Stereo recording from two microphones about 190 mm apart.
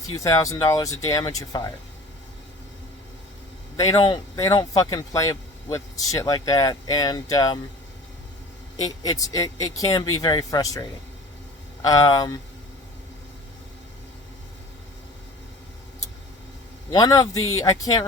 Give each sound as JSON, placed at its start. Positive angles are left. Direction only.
{"t": 0.1, "sound": "speech", "side_deg": 15}
{"t": 3.8, "sound": "speech", "side_deg": 25}
{"t": 8.7, "sound": "speech", "side_deg": 20}
{"t": 16.9, "sound": "speech", "side_deg": 20}